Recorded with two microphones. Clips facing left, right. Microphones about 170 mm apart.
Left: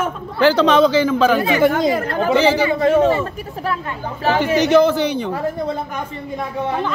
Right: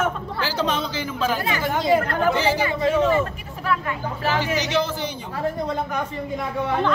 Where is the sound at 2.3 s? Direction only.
80° left.